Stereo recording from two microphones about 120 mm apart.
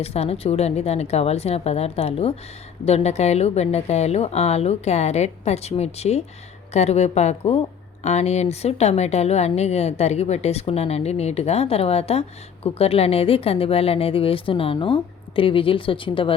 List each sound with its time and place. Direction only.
0.0 s a woman's voice: 60° left (ahead or behind)